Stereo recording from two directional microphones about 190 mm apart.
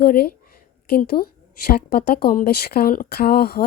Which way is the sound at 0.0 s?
55° left (ahead or behind).